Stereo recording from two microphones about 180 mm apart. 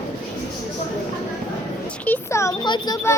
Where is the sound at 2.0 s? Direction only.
10° left (ahead or behind).